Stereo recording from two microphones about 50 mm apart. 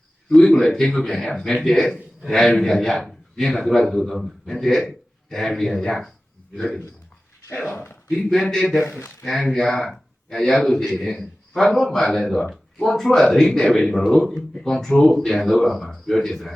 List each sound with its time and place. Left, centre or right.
0.4 s a man's voice: centre
8.1 s speech: centre
8.9 s speech: left
9.2 s a man's voice: centre